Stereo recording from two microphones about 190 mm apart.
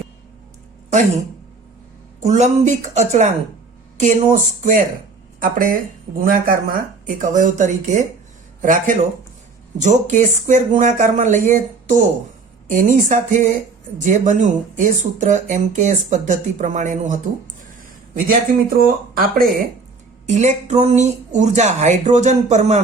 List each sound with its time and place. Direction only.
2.2 s speech: 40° right (ahead or behind)
20.2 s speech: 40° right (ahead or behind)